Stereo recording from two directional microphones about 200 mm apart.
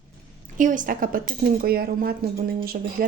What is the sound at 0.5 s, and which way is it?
A woman's voice, 40° right (ahead or behind).